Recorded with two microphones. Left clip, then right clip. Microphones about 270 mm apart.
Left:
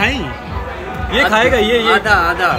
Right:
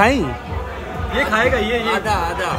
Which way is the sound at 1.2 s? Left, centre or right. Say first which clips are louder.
Left 5 dB; left.